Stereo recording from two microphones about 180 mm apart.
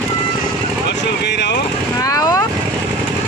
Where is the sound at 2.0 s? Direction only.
20° left (ahead or behind).